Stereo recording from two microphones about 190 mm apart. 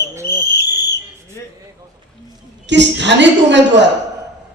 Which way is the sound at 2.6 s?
70° right (ahead or behind).